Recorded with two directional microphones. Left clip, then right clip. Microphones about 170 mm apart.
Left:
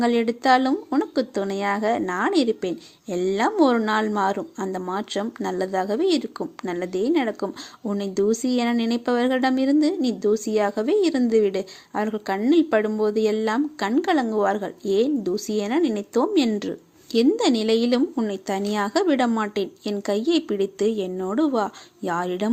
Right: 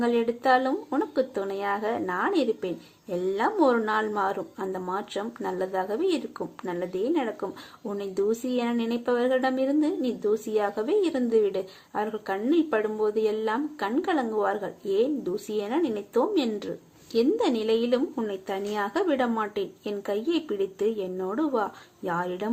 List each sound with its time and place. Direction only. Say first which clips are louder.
0.0 s speech: left 3 dB; 50° left (ahead or behind)